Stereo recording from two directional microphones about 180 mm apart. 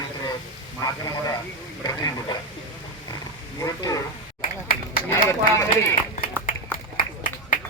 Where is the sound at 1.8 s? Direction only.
25° left (ahead or behind).